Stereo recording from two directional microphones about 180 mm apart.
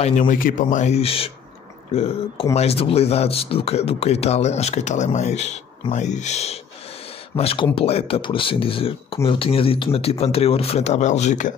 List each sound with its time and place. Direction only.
0.0 s speech: 45° left (ahead or behind)